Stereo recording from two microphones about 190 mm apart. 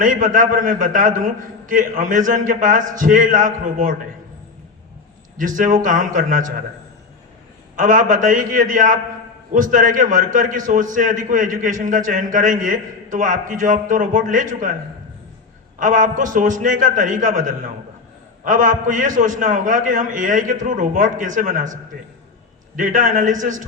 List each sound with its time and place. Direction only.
0.0 s a man's voice: 45° right (ahead or behind)
5.4 s a man's voice: 45° right (ahead or behind)
7.8 s a man's voice: 45° right (ahead or behind)
15.8 s a man's voice: 40° right (ahead or behind)